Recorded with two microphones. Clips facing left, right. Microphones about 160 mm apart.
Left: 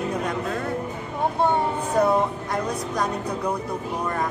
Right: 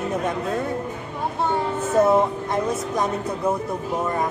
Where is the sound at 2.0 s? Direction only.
20° right (ahead or behind).